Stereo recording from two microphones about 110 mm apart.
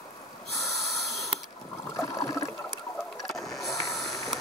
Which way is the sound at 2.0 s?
30° left (ahead or behind).